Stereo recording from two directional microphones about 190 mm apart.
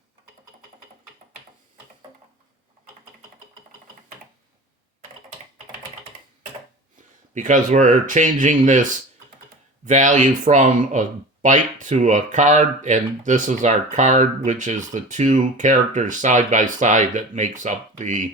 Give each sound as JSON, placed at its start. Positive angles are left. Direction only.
{"t": 7.3, "sound": "speech", "side_deg": -40}